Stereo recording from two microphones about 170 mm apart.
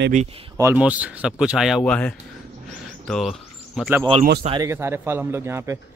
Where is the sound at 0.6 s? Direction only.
10° right (ahead or behind).